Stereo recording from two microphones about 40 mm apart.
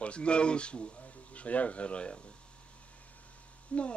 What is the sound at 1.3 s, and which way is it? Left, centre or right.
Speech, left.